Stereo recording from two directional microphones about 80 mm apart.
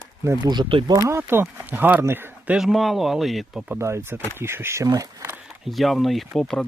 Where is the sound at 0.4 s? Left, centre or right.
Right.